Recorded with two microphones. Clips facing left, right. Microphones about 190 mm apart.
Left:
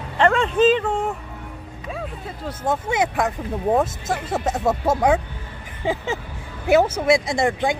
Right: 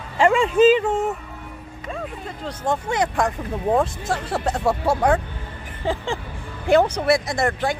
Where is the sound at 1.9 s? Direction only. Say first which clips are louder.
Right 1 dB; 5° left (ahead or behind).